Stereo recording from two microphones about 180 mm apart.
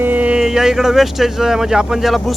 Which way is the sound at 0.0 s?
10° right (ahead or behind).